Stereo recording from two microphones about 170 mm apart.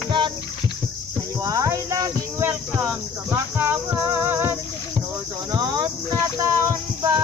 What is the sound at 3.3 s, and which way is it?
Speech, 15° right (ahead or behind).